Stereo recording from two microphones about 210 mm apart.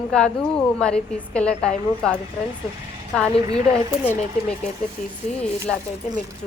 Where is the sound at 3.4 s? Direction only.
20° right (ahead or behind).